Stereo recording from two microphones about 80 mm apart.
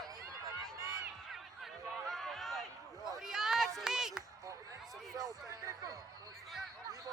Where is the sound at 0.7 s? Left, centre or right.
Right.